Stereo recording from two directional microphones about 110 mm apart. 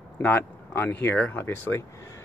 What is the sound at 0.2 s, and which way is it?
Speech, 15° left (ahead or behind).